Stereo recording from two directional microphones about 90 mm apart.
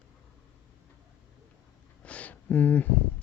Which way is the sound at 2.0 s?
15° left (ahead or behind).